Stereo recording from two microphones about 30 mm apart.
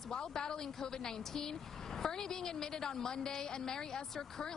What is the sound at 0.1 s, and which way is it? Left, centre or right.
Speech, left.